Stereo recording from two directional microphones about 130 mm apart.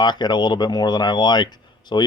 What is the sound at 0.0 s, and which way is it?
Speech, 35° left (ahead or behind).